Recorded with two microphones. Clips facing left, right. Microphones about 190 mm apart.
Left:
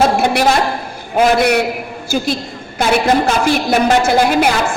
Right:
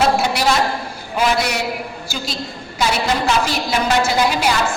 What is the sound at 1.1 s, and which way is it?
A woman's voice, 55° left (ahead or behind).